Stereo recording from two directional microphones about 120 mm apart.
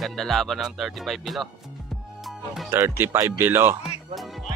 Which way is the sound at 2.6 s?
20° right (ahead or behind).